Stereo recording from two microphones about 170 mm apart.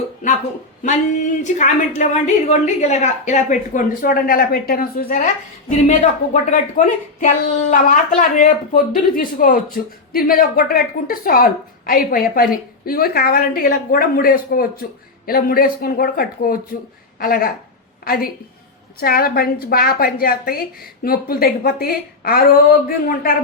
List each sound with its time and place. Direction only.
0.8 s a woman's voice: 45° left (ahead or behind)